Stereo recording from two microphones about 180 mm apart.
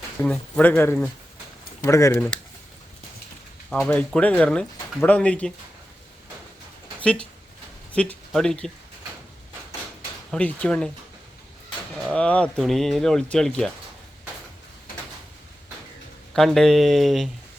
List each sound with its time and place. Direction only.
0.2 s speech: 5° left (ahead or behind)
3.7 s speech: 5° left (ahead or behind)
7.0 s speech: 5° left (ahead or behind)
10.3 s speech: 5° left (ahead or behind)
12.1 s speech: 5° left (ahead or behind)
16.3 s speech: centre (ahead or behind)